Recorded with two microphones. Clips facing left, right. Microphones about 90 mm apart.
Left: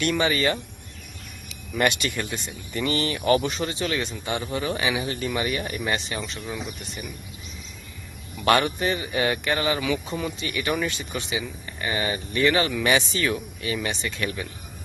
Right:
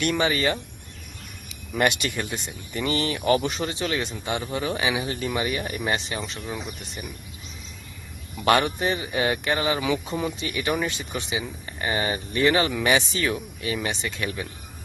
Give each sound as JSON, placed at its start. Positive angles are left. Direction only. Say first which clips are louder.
{"t": 0.0, "sound": "speech", "louder": "even", "side_deg": -5}
{"t": 1.7, "sound": "speech", "louder": "even", "side_deg": -15}
{"t": 8.4, "sound": "speech", "louder": "even", "side_deg": -5}
{"t": 8.8, "sound": "speech", "louder": "even", "side_deg": -15}
{"t": 9.8, "sound": "speech", "louder": "right 1 dB", "side_deg": -20}
{"t": 11.3, "sound": "speech", "louder": "even", "side_deg": -25}